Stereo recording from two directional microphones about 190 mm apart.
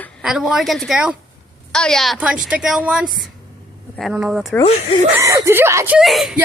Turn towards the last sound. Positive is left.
turn(degrees=0)  # may be behind; listen again after turning